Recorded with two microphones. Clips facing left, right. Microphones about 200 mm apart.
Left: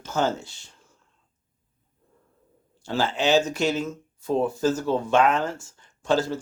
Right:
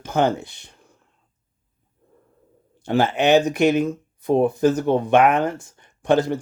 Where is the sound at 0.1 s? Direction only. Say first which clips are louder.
Right 5 dB; 60° right (ahead or behind).